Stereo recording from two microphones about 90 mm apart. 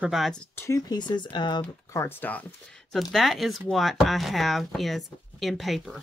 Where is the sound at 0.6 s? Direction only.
40° left (ahead or behind); by 1.7 s 55° left (ahead or behind).